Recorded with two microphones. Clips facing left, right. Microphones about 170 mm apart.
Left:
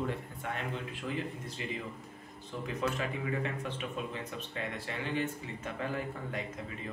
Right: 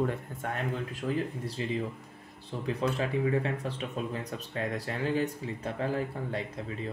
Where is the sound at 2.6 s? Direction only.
35° right (ahead or behind).